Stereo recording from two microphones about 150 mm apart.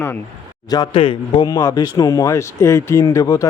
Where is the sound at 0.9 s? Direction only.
35° left (ahead or behind).